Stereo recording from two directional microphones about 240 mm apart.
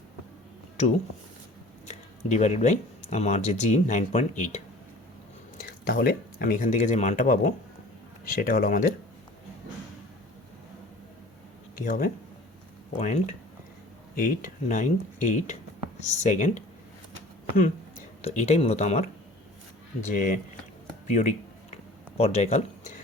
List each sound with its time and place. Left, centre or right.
1.9 s speech: left
11.9 s speech: left
20.1 s speech: left
21.1 s a sound: left
22.2 s speech: left